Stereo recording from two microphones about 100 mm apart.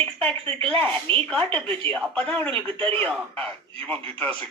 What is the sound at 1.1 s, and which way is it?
Speech, 65° right (ahead or behind).